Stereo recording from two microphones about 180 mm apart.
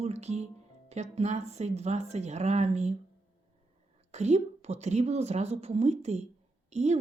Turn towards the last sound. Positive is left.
turn(degrees=-40)  # may be behind; listen again after turning